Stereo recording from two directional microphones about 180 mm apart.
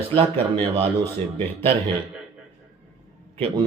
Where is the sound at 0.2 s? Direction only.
30° right (ahead or behind).